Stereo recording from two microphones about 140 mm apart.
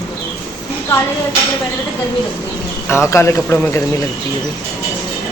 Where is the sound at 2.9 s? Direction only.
20° left (ahead or behind).